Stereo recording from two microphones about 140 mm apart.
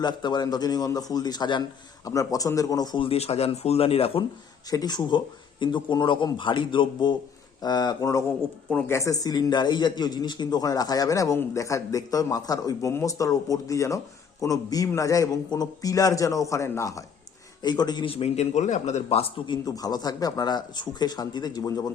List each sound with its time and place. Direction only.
0.0 s a man's voice: 30° left (ahead or behind)
4.7 s a man's voice: 30° left (ahead or behind); by 19.0 s 55° left (ahead or behind)
19.0 s a man's voice: 40° left (ahead or behind)
19.6 s a man's voice: 25° left (ahead or behind)